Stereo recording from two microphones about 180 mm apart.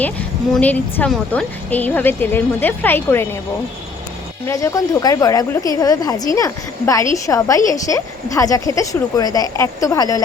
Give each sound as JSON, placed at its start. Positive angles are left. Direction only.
{"t": 0.5, "sound": "speech", "side_deg": 10}
{"t": 4.4, "sound": "a woman's voice", "side_deg": 15}